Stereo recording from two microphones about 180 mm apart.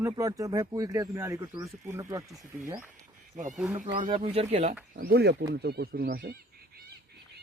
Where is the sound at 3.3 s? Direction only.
40° right (ahead or behind).